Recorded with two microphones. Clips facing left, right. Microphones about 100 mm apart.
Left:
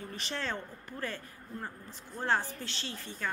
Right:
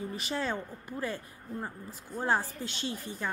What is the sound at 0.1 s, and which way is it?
Speech, 10° right (ahead or behind).